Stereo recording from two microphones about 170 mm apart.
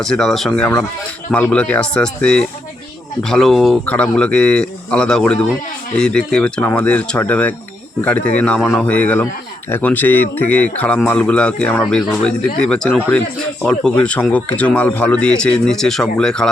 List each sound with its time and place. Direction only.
0.0 s speech: 5° left (ahead or behind)